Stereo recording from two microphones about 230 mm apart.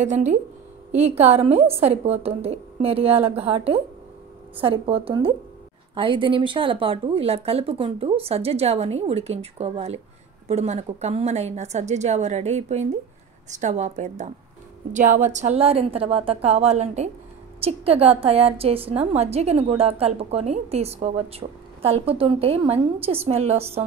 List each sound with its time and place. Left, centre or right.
0.0 s a woman's voice: right